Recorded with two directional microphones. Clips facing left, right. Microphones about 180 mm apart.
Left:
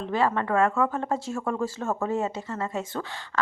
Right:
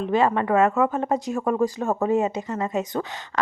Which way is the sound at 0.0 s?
20° right (ahead or behind).